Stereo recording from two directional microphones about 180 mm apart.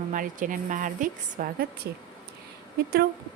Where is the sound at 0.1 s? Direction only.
45° right (ahead or behind).